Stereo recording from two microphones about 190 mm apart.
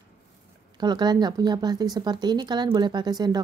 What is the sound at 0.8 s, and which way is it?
A woman's voice, 20° right (ahead or behind).